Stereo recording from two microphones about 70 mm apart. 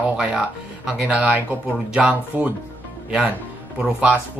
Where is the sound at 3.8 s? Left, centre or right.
Centre.